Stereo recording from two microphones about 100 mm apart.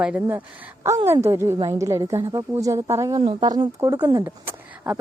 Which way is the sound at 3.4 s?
45° right (ahead or behind).